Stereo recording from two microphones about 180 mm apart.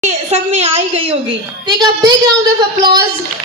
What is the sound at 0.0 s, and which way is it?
A woman's voice, 35° right (ahead or behind).